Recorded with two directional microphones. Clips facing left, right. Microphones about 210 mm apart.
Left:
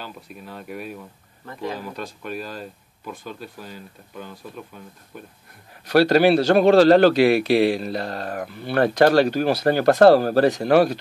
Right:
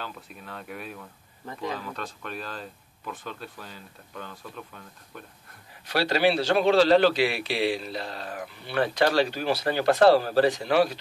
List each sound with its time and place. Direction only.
0.0 s speech: 5° left (ahead or behind)
5.9 s a man's voice: 45° left (ahead or behind)